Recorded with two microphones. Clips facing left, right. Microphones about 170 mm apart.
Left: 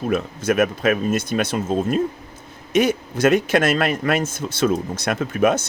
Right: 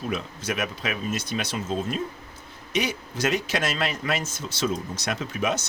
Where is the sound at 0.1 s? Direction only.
50° left (ahead or behind).